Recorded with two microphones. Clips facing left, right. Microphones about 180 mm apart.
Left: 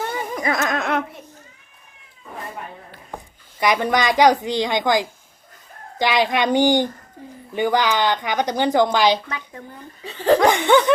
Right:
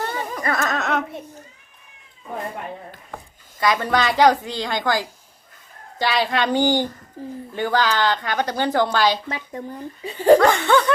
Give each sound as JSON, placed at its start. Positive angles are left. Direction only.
{"t": 0.1, "sound": "a sound", "side_deg": 15}
{"t": 3.6, "sound": "a woman's voice", "side_deg": 15}
{"t": 9.3, "sound": "speech", "side_deg": -35}
{"t": 10.0, "sound": "speech", "side_deg": -10}
{"t": 10.4, "sound": "a woman's voice", "side_deg": 15}